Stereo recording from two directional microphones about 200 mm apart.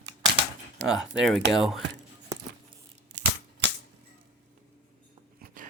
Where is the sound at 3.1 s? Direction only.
60° right (ahead or behind).